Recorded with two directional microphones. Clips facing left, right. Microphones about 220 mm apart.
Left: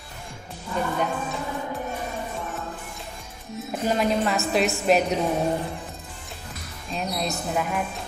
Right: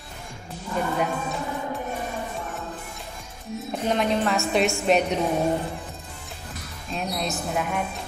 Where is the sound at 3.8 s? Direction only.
5° left (ahead or behind).